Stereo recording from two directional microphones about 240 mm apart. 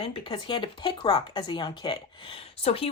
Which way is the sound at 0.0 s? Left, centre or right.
Centre.